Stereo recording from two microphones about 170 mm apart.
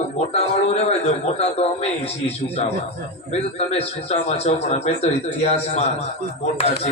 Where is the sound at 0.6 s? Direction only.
35° left (ahead or behind).